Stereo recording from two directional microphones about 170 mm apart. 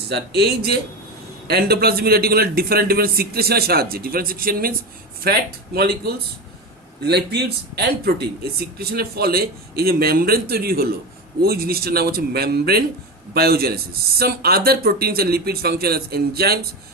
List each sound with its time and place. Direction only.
0.1 s speech: 70° right (ahead or behind)